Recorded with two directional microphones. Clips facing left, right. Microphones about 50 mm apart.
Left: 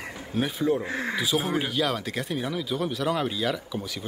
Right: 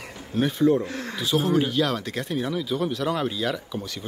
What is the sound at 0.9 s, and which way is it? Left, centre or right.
Speech, centre.